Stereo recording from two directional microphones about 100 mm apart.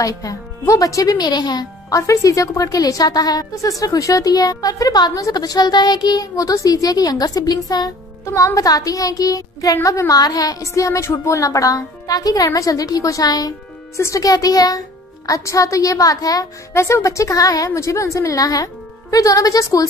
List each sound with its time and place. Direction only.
0.0 s speech: 35° left (ahead or behind)